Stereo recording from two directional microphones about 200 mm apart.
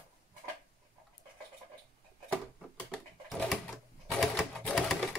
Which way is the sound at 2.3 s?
Centre (ahead or behind).